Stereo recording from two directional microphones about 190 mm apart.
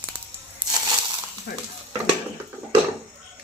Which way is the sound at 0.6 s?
25° right (ahead or behind).